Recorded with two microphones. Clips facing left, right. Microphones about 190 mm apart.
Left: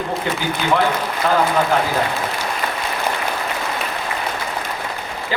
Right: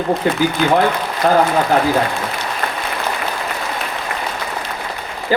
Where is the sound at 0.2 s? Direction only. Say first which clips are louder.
Right 5 dB; 45° right (ahead or behind).